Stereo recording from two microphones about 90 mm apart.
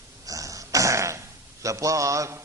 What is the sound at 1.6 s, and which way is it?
Speech, 35° right (ahead or behind).